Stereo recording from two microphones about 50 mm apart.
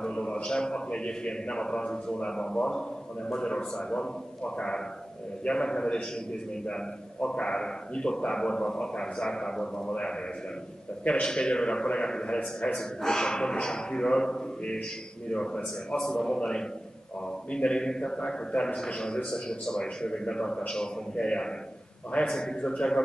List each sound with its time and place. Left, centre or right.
0.0 s a man's voice: centre